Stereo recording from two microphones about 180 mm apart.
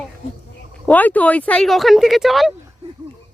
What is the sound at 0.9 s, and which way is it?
Speech, 10° left (ahead or behind).